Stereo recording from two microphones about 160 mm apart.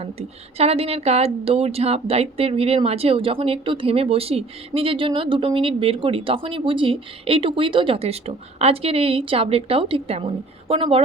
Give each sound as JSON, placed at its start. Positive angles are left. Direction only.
{"t": 0.0, "sound": "a woman's voice", "side_deg": -40}